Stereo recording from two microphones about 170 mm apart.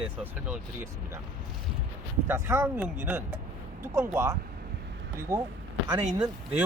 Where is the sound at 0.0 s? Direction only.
5° right (ahead or behind).